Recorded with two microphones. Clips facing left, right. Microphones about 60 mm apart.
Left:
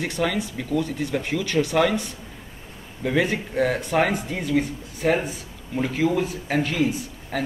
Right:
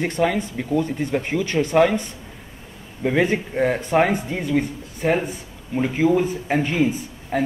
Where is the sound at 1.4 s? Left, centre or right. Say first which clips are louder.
Right 2 dB; right.